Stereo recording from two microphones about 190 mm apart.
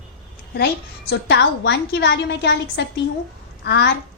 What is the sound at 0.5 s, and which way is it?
A woman's voice, 65° left (ahead or behind).